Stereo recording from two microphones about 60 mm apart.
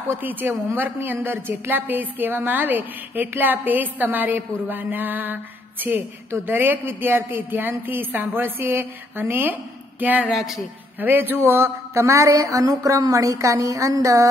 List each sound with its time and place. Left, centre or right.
0.2 s a woman's voice: right
10.3 s speech: centre
11.0 s a woman's voice: right
11.4 s a woman's voice: right